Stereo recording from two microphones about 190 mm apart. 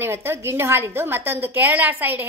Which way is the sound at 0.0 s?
15° right (ahead or behind).